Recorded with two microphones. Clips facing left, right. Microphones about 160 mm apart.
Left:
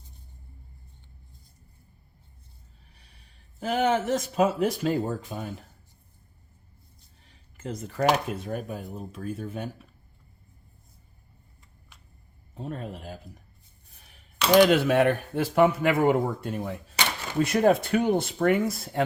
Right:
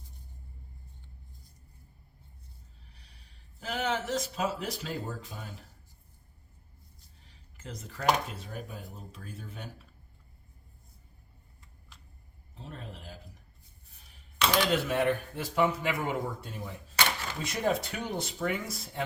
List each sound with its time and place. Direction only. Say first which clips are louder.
3.6 s speech: left 8 dB; 55° left (ahead or behind)
7.5 s speech: left 9 dB; 55° left (ahead or behind)
12.5 s a man's voice: left 9 dB; 55° left (ahead or behind)
14.5 s speech: left 11 dB; 75° left (ahead or behind)